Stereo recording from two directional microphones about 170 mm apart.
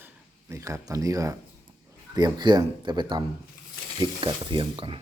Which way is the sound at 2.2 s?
25° right (ahead or behind).